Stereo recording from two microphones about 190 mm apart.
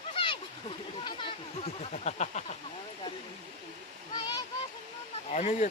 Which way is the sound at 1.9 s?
35° left (ahead or behind).